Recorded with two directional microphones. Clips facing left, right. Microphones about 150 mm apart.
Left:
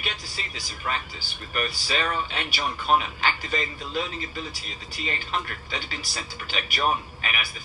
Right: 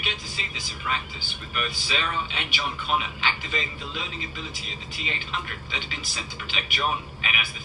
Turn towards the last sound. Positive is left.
turn(degrees=40)  # may be behind; listen again after turning